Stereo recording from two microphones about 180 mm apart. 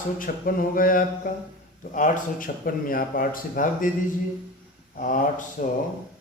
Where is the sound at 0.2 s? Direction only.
50° left (ahead or behind).